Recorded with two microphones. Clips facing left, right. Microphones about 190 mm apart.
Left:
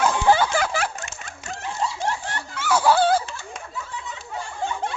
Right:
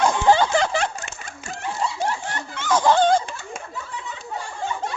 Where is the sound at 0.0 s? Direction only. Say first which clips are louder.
Right 1 dB; 15° right (ahead or behind).